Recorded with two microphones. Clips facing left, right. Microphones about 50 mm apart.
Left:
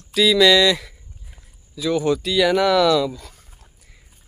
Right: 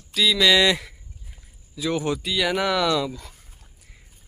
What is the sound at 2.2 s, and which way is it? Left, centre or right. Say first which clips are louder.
Speech: left 6 dB; centre.